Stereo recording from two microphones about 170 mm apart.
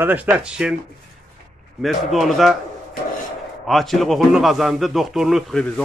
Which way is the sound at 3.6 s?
Centre (ahead or behind).